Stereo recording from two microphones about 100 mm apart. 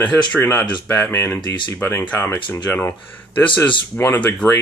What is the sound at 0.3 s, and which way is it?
Speech, 25° left (ahead or behind).